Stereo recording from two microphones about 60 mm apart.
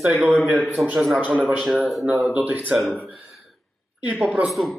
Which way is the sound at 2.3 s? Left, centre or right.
Right.